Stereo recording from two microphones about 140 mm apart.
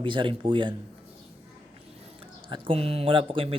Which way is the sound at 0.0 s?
35° right (ahead or behind).